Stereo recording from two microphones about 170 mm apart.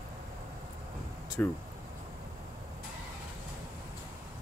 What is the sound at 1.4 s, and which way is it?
Speech, 10° left (ahead or behind).